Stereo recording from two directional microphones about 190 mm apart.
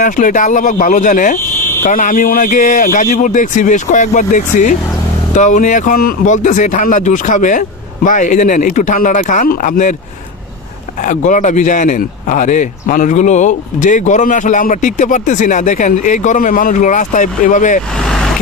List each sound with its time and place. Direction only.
0.0 s speech: 40° left (ahead or behind)
11.1 s speech: 40° left (ahead or behind)
18.0 s vehicle: 5° left (ahead or behind)